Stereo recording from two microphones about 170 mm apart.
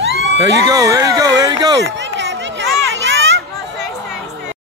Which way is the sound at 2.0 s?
90° right.